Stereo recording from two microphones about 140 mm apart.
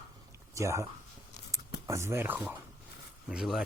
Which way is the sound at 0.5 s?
20° right (ahead or behind).